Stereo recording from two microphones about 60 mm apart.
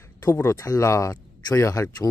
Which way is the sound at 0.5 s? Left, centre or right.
Left.